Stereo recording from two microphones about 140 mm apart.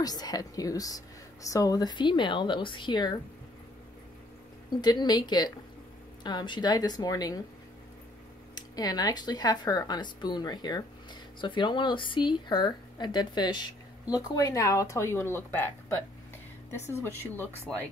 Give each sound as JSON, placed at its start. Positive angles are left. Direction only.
{"t": 0.0, "sound": "speech", "side_deg": 30}
{"t": 4.8, "sound": "speech", "side_deg": 30}
{"t": 8.5, "sound": "speech", "side_deg": 30}
{"t": 16.7, "sound": "speech", "side_deg": 20}